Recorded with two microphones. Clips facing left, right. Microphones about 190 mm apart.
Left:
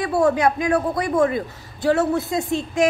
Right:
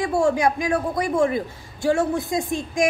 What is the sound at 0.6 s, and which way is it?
Speech, 20° right (ahead or behind).